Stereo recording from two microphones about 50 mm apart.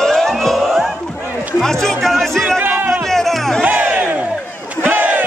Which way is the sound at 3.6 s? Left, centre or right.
Right.